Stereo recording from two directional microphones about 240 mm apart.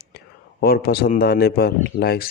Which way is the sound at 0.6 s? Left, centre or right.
Left.